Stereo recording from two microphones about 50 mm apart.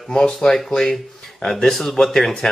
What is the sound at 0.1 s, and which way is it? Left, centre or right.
Speech, centre.